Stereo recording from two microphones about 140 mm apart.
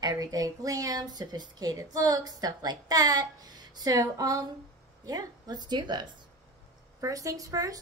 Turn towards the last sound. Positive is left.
turn(degrees=-25)  # may be behind; listen again after turning